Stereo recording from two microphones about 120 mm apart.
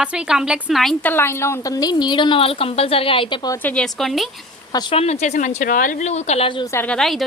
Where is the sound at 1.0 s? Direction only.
20° left (ahead or behind); by 3.3 s 45° left (ahead or behind).